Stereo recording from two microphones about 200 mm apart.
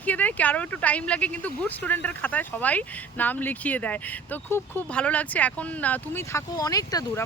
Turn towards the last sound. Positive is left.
turn(degrees=20)  # may be behind; listen again after turning